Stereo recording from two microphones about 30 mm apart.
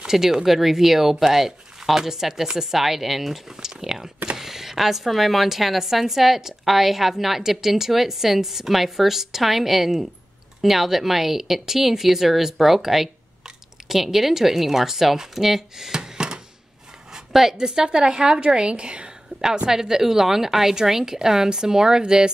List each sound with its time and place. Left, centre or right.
0.0 s speech: centre
15.9 s music: right
17.3 s a woman's voice: centre
17.6 s a woman's voice: right
19.4 s a woman's voice: right